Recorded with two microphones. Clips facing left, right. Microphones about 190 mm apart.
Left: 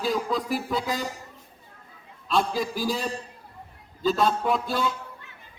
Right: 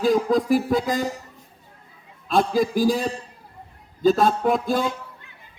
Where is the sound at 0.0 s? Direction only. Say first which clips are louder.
Right 7 dB; 45° right (ahead or behind).